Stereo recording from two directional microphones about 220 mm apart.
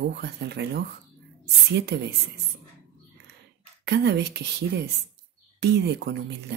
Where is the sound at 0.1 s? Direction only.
50° right (ahead or behind).